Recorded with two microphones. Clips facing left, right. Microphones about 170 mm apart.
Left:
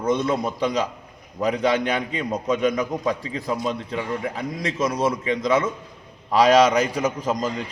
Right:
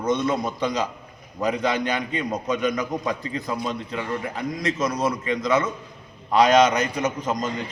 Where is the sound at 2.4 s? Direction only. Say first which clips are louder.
Left 4 dB; 30° left (ahead or behind).